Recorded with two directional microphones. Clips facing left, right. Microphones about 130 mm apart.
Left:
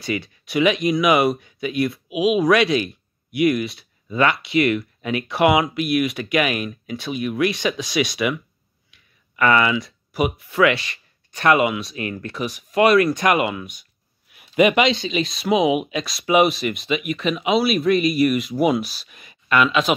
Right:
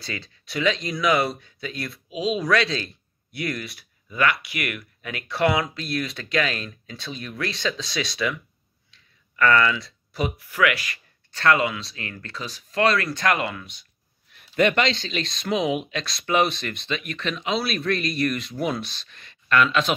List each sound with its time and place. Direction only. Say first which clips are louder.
0.0 s speech: left 9 dB; 15° left (ahead or behind)